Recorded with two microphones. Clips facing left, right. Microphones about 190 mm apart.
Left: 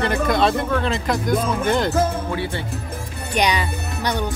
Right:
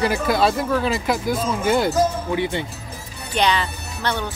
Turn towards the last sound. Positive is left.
turn(degrees=15)  # may be behind; listen again after turning